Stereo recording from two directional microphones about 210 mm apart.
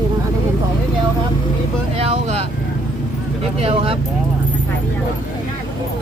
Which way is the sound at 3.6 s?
25° right (ahead or behind).